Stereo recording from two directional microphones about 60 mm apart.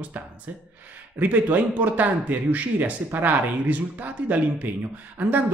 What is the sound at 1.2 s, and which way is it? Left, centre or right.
Speech, right.